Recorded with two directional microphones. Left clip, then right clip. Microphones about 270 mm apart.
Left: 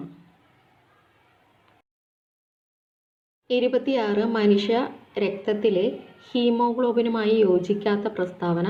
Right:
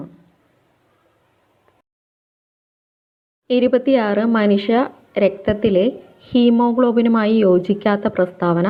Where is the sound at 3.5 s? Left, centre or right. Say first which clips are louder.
Right 7 dB; right.